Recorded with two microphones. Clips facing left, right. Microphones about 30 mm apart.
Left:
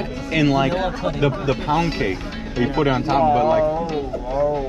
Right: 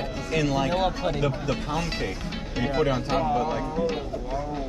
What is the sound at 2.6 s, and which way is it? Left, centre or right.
Speech, centre.